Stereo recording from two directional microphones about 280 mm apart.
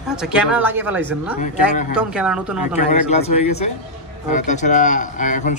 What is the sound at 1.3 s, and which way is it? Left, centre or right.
Speech, left.